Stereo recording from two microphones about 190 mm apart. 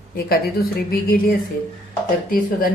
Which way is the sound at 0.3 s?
50° left (ahead or behind).